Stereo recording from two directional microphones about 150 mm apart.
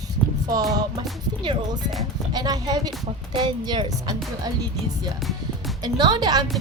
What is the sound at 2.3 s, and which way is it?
Speech, 30° right (ahead or behind).